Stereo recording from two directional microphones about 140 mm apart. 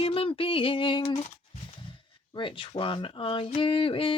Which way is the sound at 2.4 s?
40° left (ahead or behind).